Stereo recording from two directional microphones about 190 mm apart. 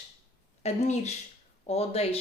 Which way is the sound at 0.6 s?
35° left (ahead or behind).